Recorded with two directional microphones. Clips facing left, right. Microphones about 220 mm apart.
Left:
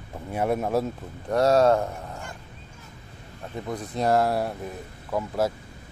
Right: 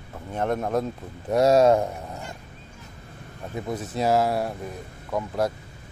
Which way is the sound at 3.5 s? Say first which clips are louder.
Right 1 dB; 5° right (ahead or behind).